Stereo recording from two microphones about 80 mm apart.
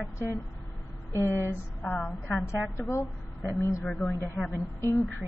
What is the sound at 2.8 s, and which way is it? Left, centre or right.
Speech, left.